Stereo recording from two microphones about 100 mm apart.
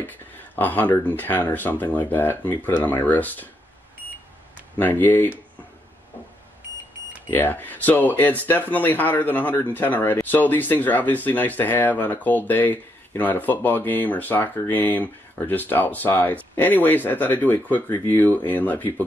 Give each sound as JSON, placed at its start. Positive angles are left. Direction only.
{"t": 0.6, "sound": "speech", "side_deg": 15}
{"t": 4.7, "sound": "speech", "side_deg": 20}
{"t": 7.2, "sound": "speech", "side_deg": 20}